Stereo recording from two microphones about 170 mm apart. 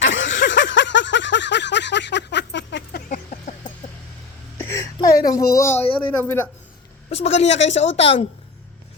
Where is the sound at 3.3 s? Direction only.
45° left (ahead or behind).